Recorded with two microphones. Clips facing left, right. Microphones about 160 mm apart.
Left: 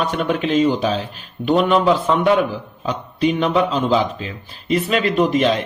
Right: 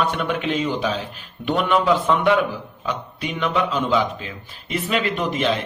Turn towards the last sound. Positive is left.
turn(degrees=35)  # may be behind; listen again after turning